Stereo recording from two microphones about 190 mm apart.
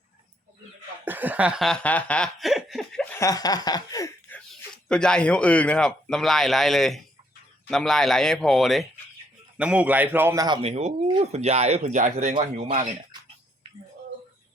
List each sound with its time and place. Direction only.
1.0 s chuckle: 10° right (ahead or behind)
3.2 s speech: 20° left (ahead or behind)
4.4 s a man's voice: 5° left (ahead or behind); by 10.6 s 20° right (ahead or behind)
10.6 s speech: 35° right (ahead or behind)